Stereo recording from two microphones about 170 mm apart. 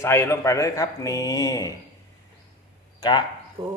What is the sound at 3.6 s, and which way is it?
Speech, 35° right (ahead or behind).